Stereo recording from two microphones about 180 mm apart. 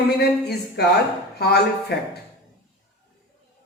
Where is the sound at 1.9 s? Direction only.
65° left (ahead or behind).